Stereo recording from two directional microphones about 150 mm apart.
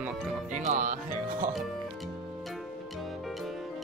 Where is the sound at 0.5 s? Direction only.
55° right (ahead or behind).